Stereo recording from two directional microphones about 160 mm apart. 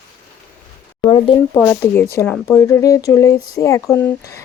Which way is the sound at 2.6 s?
20° left (ahead or behind).